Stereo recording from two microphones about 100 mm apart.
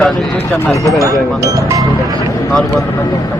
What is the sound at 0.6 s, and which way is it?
Speech, 30° left (ahead or behind).